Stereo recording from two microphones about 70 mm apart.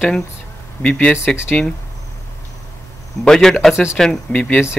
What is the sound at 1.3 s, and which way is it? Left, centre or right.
Speech, centre.